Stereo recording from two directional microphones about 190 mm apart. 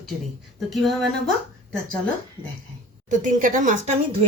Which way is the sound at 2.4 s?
10° right (ahead or behind).